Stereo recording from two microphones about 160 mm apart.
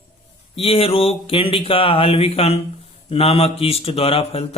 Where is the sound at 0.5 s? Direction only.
35° left (ahead or behind).